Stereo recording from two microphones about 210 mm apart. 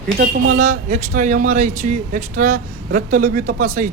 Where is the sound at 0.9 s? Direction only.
40° right (ahead or behind).